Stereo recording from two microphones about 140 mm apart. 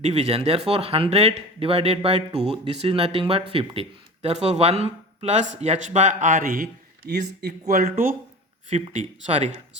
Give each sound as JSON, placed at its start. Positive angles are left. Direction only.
{"t": 0.0, "sound": "speech", "side_deg": -50}
{"t": 8.9, "sound": "speech", "side_deg": -55}